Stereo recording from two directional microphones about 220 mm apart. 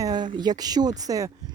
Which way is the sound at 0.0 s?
20° right (ahead or behind).